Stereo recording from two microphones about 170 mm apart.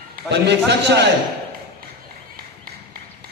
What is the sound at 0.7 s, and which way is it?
Speech, 90° right.